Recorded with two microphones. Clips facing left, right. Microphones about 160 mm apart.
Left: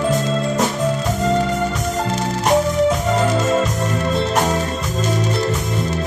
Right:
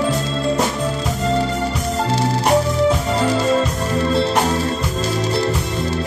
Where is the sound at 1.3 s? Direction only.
30° right (ahead or behind).